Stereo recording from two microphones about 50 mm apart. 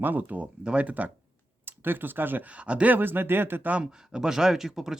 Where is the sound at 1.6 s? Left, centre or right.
Right.